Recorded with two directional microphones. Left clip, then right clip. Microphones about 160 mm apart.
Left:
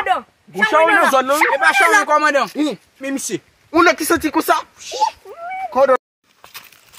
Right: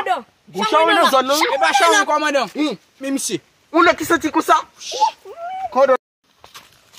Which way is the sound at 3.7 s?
50° left (ahead or behind).